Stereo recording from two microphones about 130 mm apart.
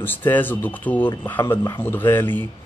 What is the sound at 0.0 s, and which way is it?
A man's voice, 15° left (ahead or behind).